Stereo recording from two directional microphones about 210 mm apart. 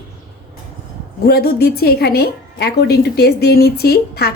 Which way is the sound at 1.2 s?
45° left (ahead or behind).